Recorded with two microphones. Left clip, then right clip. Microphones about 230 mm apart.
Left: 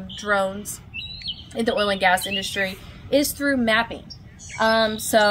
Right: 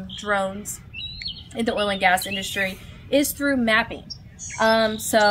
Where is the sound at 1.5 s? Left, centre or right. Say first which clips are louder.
Left 2 dB; centre.